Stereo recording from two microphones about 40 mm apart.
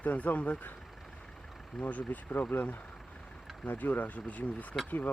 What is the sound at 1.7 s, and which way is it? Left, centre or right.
Speech, left.